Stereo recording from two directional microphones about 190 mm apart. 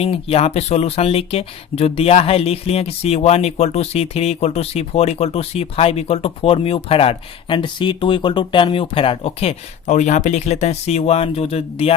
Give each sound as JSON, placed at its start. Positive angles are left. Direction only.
{"t": 0.0, "sound": "speech", "side_deg": 30}